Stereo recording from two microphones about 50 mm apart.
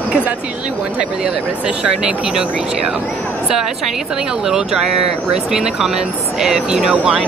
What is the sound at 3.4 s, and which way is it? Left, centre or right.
Speech, centre.